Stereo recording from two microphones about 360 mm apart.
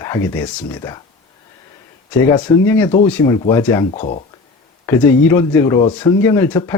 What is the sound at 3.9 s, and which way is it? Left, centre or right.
Speech, centre.